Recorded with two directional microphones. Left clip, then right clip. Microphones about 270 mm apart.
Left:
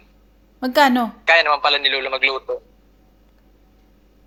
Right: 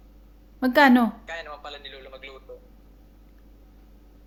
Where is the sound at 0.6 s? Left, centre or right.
Centre.